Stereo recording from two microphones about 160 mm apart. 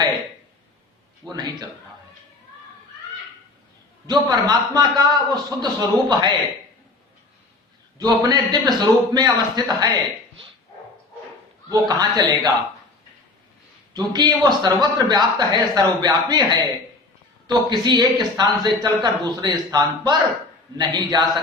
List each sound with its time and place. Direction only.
1.2 s speech: 25° right (ahead or behind)
4.0 s speech: 25° right (ahead or behind)
7.9 s speech: 25° right (ahead or behind)
11.7 s speech: 25° right (ahead or behind)
13.9 s speech: 25° right (ahead or behind)